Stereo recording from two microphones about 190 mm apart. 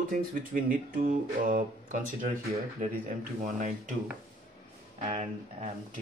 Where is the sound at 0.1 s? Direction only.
45° right (ahead or behind).